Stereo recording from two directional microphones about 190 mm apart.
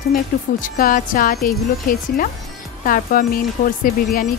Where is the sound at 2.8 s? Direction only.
45° left (ahead or behind).